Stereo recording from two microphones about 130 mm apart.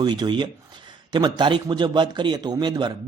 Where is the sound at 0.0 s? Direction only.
35° right (ahead or behind).